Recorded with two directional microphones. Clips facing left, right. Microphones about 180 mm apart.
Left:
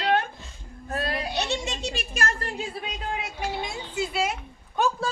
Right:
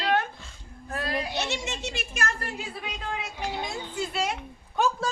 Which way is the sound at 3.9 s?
5° left (ahead or behind).